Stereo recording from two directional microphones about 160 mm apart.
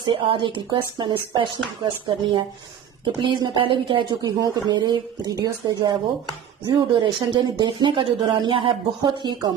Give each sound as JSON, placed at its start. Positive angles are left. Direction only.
{"t": 0.0, "sound": "speech", "side_deg": -30}